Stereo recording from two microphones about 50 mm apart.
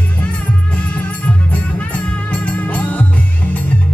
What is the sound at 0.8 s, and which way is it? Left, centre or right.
Music, left.